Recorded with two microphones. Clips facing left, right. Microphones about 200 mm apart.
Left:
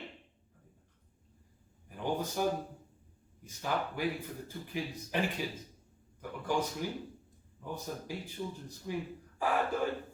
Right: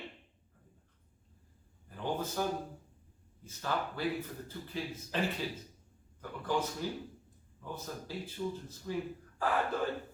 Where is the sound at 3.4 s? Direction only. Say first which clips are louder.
Left 1 dB; 15° left (ahead or behind).